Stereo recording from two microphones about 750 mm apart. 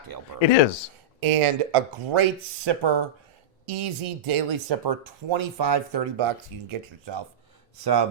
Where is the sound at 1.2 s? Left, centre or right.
Right.